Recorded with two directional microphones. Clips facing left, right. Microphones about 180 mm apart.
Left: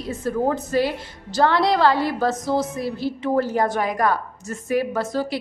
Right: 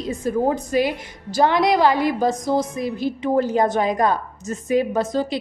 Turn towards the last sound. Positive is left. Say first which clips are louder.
# right 2 dB
turn(degrees=-20)  # may be behind; listen again after turning